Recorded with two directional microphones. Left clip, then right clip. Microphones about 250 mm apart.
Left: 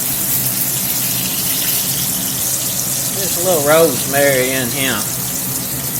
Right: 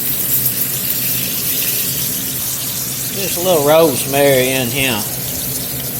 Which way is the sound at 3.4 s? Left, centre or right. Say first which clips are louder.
Right 1 dB; right.